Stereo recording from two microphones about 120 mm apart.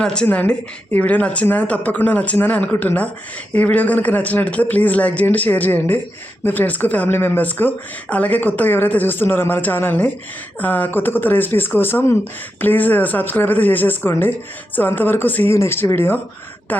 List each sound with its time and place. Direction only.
0.0 s a woman's voice: 5° left (ahead or behind)